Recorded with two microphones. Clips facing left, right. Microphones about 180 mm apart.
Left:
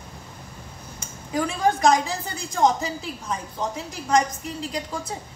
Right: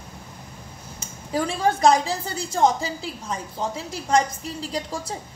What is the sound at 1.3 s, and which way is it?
Speech, 30° right (ahead or behind).